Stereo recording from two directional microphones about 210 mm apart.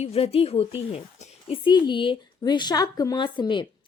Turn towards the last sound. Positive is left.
turn(degrees=20)  # may be behind; listen again after turning